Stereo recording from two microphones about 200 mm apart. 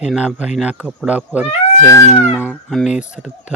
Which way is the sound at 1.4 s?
10° left (ahead or behind).